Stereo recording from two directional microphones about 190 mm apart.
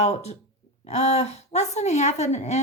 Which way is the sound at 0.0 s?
35° left (ahead or behind).